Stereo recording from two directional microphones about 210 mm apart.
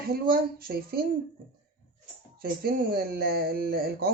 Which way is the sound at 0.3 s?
45° right (ahead or behind).